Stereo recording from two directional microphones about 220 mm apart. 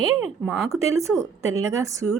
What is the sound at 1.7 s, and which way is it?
Speech, 15° right (ahead or behind).